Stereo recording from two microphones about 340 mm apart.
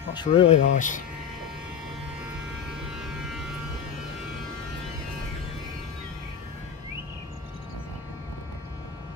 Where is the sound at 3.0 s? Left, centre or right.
Centre.